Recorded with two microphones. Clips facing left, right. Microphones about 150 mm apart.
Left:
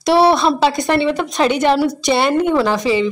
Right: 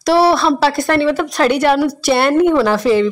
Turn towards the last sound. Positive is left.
turn(degrees=10)  # may be behind; listen again after turning